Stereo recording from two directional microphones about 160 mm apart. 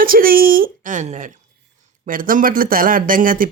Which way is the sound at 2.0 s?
60° right (ahead or behind).